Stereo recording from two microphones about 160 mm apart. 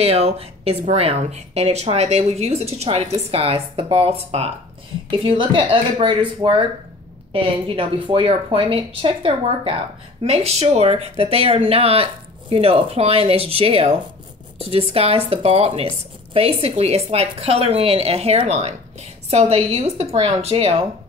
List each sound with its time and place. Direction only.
0.0 s speech: 40° right (ahead or behind)